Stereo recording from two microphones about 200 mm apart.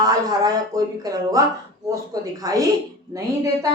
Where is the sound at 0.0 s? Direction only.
20° right (ahead or behind).